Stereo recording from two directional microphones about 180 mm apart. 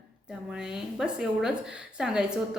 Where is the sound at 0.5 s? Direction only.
5° right (ahead or behind).